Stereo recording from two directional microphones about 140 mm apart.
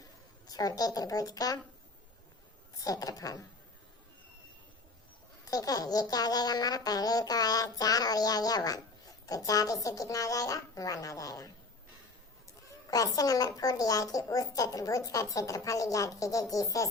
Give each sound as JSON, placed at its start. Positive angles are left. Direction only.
{"t": 0.4, "sound": "speech", "side_deg": 25}
{"t": 2.8, "sound": "speech", "side_deg": 25}
{"t": 5.5, "sound": "speech", "side_deg": 25}
{"t": 12.9, "sound": "speech", "side_deg": 25}